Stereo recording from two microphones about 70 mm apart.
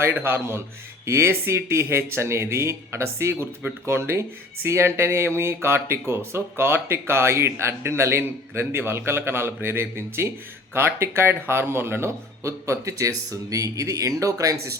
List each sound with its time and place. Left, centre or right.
0.0 s speech: right